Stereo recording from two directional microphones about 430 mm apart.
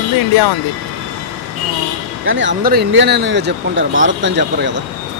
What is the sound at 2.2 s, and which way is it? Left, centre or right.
Speech, right.